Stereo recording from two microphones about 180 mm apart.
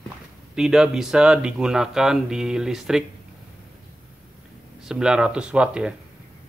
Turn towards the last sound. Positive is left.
turn(degrees=-5)  # may be behind; listen again after turning